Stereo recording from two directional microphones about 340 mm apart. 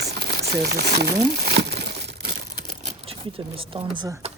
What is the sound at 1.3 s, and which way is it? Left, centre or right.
Crumpling, right.